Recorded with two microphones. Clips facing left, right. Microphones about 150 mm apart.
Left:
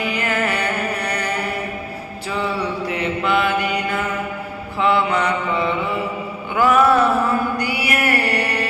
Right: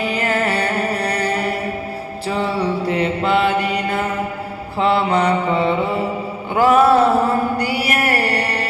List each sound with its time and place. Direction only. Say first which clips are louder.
0.0 s music: right 2 dB; 30° right (ahead or behind)
2.2 s mantra: right 3 dB; 30° right (ahead or behind)
6.5 s a sound: right 2 dB; 30° right (ahead or behind)